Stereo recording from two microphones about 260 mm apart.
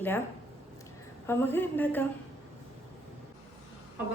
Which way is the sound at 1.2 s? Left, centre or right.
Centre.